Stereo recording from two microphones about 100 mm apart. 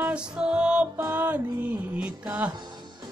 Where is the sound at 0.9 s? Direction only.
25° right (ahead or behind).